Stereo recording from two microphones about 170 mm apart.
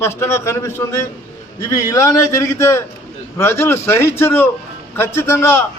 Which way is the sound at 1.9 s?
15° left (ahead or behind).